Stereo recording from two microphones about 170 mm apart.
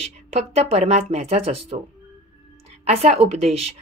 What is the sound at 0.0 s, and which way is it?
Speech, 35° right (ahead or behind).